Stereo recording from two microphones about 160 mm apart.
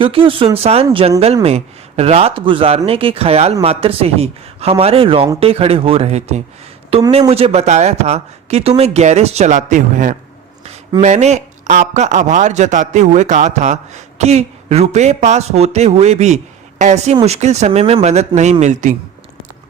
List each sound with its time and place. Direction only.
0.0 s a man's voice: 35° right (ahead or behind); by 10.2 s 55° right (ahead or behind)
11.0 s a man's voice: 45° right (ahead or behind)